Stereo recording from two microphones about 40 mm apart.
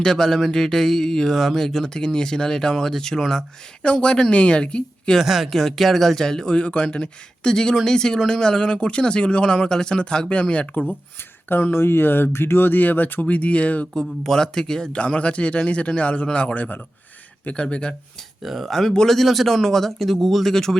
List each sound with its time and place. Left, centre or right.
0.0 s speech: centre
3.8 s speech: left
5.2 s speech: centre
5.5 s speech: centre
6.6 s speech: left
11.4 s speech: left
13.2 s speech: left
13.9 s speech: centre
14.9 s speech: left
16.6 s speech: left
17.4 s speech: left
18.4 s speech: centre
18.7 s speech: centre